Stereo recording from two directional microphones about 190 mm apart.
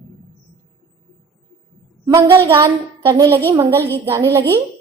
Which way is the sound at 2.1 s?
15° right (ahead or behind).